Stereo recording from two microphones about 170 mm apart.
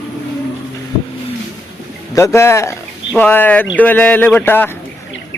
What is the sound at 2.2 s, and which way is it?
Speech, 15° left (ahead or behind).